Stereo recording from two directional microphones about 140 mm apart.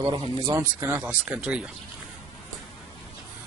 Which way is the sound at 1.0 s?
10° right (ahead or behind).